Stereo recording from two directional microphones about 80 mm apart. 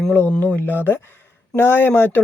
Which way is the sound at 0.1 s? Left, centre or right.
Left.